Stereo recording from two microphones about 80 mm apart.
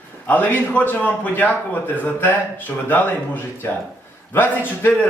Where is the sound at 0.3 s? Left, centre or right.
Left.